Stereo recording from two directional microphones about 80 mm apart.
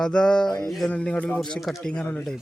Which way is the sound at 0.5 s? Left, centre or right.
Centre.